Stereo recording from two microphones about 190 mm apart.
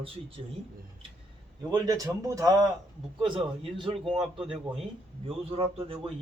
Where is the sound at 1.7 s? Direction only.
20° right (ahead or behind).